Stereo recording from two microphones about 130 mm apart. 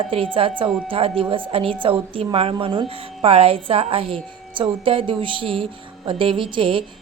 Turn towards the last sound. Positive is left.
turn(degrees=-40)  # may be behind; listen again after turning